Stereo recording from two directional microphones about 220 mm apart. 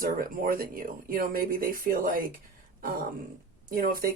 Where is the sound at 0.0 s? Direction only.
40° right (ahead or behind).